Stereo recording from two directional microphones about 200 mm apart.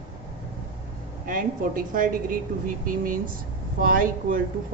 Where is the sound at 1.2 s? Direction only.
45° right (ahead or behind).